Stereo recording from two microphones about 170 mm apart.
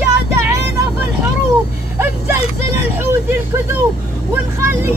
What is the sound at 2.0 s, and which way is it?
Vehicle, 15° right (ahead or behind).